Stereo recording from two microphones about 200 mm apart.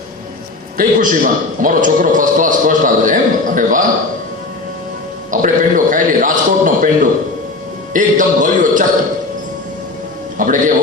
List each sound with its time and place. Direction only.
0.8 s a man's voice: 40° right (ahead or behind)
5.3 s a man's voice: 40° right (ahead or behind)
10.3 s music: 40° right (ahead or behind)